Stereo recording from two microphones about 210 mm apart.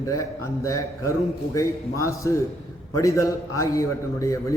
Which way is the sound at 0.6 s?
15° left (ahead or behind).